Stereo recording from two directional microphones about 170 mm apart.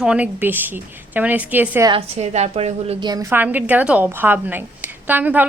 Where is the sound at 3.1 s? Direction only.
15° right (ahead or behind).